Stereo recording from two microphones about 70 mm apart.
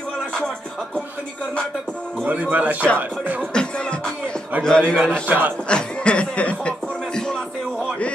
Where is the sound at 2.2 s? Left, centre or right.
Right.